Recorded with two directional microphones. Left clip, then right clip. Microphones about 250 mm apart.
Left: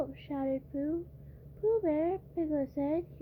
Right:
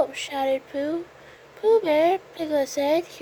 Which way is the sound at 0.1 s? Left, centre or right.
Centre.